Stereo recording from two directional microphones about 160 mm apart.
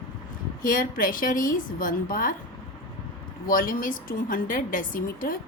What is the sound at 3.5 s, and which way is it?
A woman's voice, 60° left (ahead or behind).